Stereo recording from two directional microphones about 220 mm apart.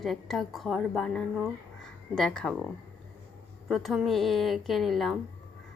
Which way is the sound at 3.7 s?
Centre (ahead or behind).